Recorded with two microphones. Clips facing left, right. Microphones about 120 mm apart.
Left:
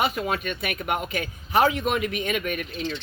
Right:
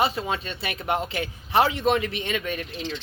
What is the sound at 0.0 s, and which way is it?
Speech, 30° right (ahead or behind).